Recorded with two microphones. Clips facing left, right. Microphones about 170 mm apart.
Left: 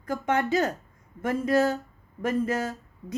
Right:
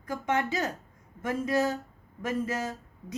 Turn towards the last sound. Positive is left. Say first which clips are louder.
# left 2 dB
turn(degrees=55)  # may be behind; listen again after turning